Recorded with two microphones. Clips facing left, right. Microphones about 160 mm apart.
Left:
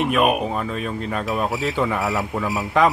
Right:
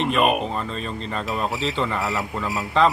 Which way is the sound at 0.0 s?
5° left (ahead or behind).